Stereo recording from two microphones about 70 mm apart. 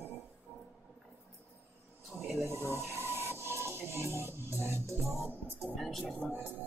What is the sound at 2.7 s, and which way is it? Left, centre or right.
Rub, right.